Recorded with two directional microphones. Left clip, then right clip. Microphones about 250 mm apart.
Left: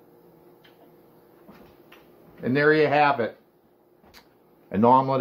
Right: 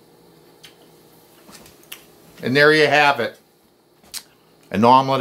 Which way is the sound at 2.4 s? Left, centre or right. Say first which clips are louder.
Right 6 dB; right.